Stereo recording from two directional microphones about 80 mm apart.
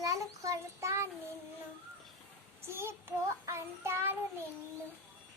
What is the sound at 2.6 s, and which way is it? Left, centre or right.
Child singing, right.